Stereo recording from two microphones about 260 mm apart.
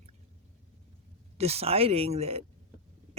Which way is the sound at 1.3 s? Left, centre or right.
Right.